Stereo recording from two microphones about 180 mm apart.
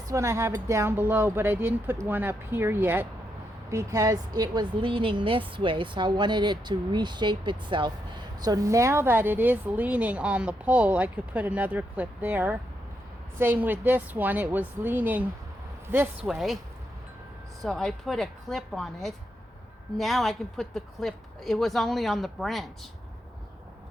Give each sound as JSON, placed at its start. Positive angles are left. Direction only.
{"t": 0.1, "sound": "a woman's voice", "side_deg": -15}
{"t": 17.6, "sound": "a woman's voice", "side_deg": 5}